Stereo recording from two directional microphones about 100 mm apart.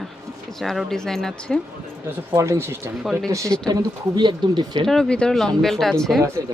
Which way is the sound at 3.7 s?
45° right (ahead or behind).